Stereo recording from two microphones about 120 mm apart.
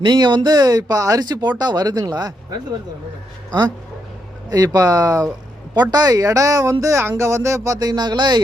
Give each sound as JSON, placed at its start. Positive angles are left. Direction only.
{"t": 0.0, "sound": "speech", "side_deg": -40}
{"t": 4.4, "sound": "speech", "side_deg": -30}